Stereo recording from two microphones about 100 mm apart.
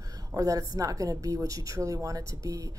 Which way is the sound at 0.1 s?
35° right (ahead or behind).